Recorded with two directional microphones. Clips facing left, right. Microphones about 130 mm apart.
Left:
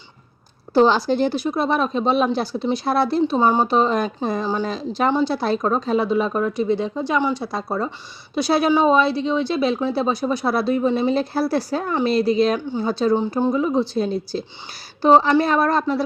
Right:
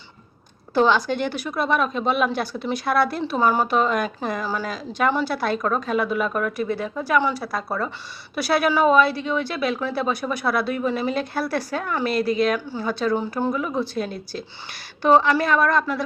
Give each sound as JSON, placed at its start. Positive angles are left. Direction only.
{"t": 0.7, "sound": "a woman's voice", "side_deg": 30}